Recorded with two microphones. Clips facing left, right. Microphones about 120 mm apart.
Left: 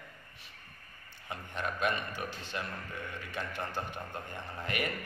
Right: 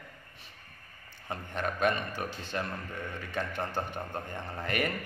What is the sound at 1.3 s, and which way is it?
A man's voice, 45° right (ahead or behind).